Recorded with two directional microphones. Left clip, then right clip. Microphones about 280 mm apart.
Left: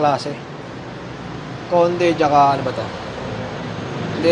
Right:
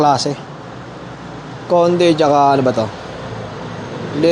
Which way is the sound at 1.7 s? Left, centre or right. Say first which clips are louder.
Right 4 dB; right.